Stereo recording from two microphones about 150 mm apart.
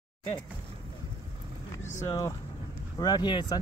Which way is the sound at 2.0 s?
20° left (ahead or behind).